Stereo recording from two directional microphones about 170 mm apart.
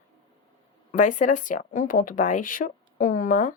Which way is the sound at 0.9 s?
50° left (ahead or behind).